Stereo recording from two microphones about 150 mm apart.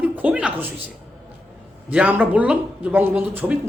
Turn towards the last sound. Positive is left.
turn(degrees=-10)  # may be behind; listen again after turning